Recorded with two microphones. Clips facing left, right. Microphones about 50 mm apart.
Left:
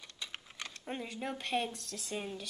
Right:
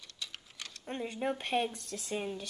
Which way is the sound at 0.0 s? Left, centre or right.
Left.